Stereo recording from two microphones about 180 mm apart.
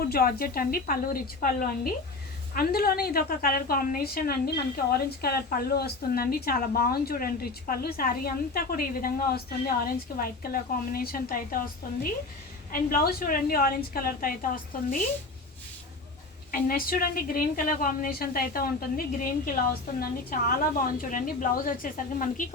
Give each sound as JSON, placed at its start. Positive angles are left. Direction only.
{"t": 0.0, "sound": "a woman's voice", "side_deg": 55}
{"t": 12.7, "sound": "a woman's voice", "side_deg": 55}
{"t": 16.5, "sound": "a woman's voice", "side_deg": 55}